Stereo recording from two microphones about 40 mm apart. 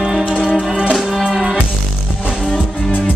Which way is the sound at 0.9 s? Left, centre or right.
Centre.